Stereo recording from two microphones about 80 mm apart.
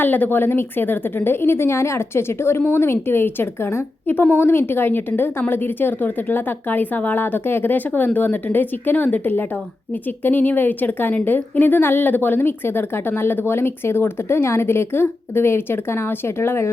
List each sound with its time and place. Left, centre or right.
0.0 s a woman's voice: left